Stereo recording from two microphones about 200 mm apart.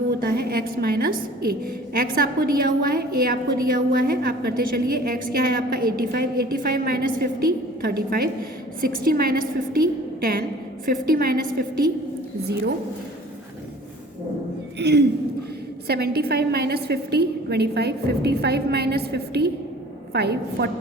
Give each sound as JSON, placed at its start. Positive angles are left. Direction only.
{"t": 0.2, "sound": "a woman's voice", "side_deg": -50}
{"t": 14.8, "sound": "a woman's voice", "side_deg": -55}